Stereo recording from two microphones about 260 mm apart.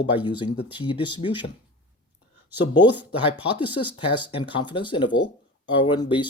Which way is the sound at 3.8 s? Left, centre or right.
Centre.